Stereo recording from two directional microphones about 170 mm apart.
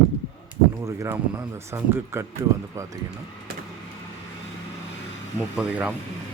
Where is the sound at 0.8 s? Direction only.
15° right (ahead or behind).